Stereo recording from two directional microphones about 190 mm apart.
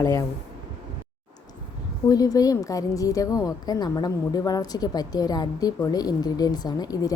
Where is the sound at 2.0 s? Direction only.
20° left (ahead or behind).